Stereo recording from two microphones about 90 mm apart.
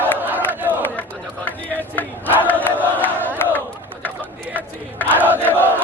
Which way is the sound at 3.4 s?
25° left (ahead or behind).